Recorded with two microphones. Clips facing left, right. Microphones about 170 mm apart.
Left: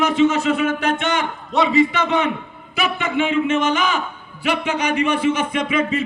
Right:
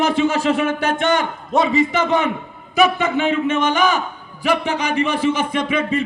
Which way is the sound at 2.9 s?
35° right (ahead or behind).